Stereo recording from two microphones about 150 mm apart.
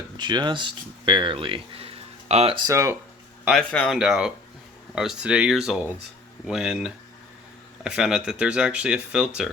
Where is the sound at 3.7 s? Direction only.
10° left (ahead or behind).